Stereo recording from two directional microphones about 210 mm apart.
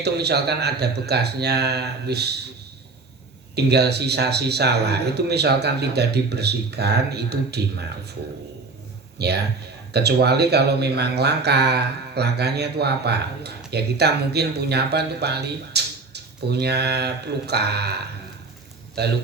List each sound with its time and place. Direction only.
0.0 s speech: 50° right (ahead or behind)
3.5 s speech: 50° right (ahead or behind)
9.1 s speech: 50° right (ahead or behind)